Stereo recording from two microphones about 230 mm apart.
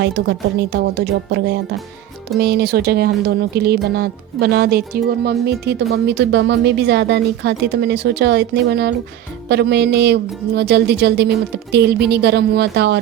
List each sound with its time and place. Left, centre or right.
0.0 s speech: right